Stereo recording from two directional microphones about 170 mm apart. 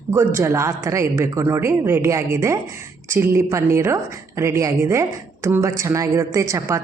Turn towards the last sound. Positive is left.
turn(degrees=-15)  # may be behind; listen again after turning